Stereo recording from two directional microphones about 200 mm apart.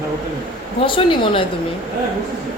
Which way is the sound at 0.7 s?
25° left (ahead or behind).